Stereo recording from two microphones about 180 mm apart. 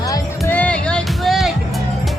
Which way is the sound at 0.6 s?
5° left (ahead or behind).